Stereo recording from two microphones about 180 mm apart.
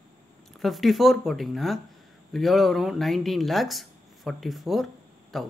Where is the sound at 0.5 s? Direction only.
Centre (ahead or behind).